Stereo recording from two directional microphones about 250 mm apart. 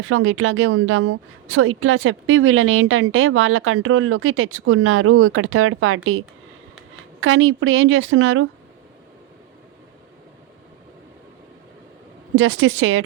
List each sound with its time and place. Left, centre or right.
0.0 s a woman's voice: right
12.4 s a woman's voice: right